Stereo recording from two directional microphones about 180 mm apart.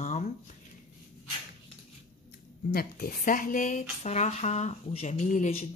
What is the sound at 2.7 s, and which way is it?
Speech, 55° left (ahead or behind).